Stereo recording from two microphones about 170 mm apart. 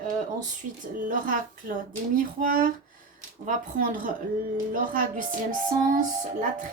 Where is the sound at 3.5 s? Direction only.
50° right (ahead or behind).